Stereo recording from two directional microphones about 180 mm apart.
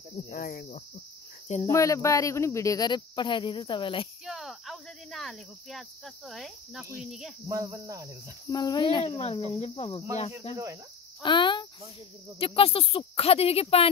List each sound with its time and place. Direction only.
0.3 s cricket: 55° left (ahead or behind)
1.7 s speech: 15° left (ahead or behind)
4.3 s speech: centre (ahead or behind)
7.4 s cricket: 20° right (ahead or behind)
8.5 s speech: 25° left (ahead or behind)
10.5 s cricket: 15° right (ahead or behind)
11.2 s speech: 25° left (ahead or behind)